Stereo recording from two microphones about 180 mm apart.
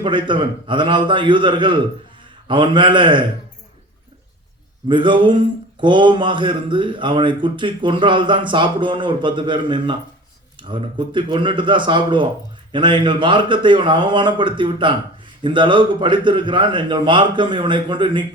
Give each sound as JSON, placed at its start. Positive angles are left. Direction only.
{"t": 0.0, "sound": "speech", "side_deg": -25}
{"t": 4.9, "sound": "speech", "side_deg": -25}